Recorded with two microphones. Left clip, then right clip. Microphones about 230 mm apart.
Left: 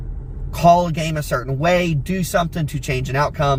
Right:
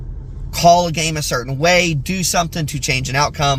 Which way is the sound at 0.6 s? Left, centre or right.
Right.